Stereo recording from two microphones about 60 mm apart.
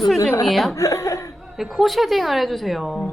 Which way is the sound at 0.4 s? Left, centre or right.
Centre.